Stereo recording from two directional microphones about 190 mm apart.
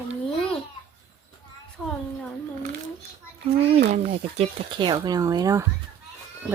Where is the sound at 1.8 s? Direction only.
5° left (ahead or behind).